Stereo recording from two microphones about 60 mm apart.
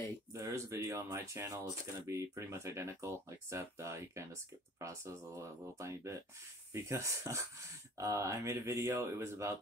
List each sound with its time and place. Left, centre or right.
0.3 s speech: right
5.4 s speech: right